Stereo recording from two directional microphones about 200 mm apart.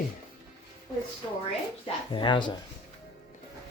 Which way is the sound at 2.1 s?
25° left (ahead or behind).